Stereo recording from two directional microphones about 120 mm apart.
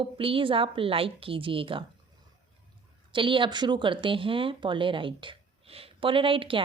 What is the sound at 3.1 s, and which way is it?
Speech, 45° right (ahead or behind).